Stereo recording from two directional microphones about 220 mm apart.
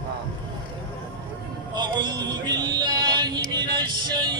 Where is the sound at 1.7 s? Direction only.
20° right (ahead or behind).